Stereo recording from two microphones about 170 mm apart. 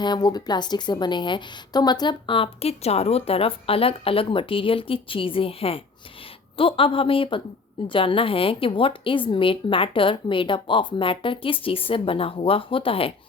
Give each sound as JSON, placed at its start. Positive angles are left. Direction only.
{"t": 0.0, "sound": "a woman's voice", "side_deg": 25}